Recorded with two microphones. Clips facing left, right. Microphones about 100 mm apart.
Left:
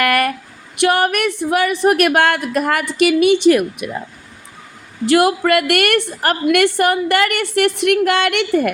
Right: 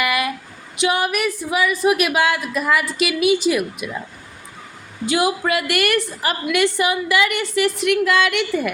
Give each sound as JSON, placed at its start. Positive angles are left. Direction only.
{"t": 0.0, "sound": "a sound", "side_deg": 60}
{"t": 0.8, "sound": "a woman's voice", "side_deg": 60}
{"t": 5.0, "sound": "a woman's voice", "side_deg": 60}